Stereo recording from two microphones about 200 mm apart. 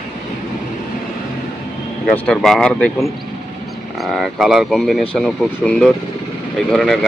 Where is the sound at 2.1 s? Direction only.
5° left (ahead or behind).